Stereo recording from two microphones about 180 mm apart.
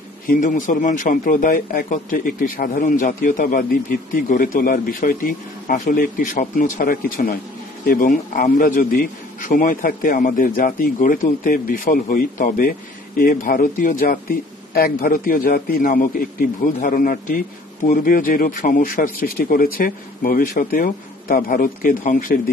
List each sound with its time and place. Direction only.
0.3 s a man's voice: 45° left (ahead or behind)